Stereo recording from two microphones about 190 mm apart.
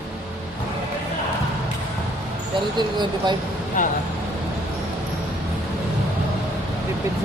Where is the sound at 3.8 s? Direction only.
45° left (ahead or behind).